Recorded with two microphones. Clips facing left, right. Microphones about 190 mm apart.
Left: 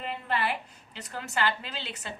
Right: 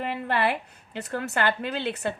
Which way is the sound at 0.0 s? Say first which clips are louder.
Right 5 dB; 60° right (ahead or behind).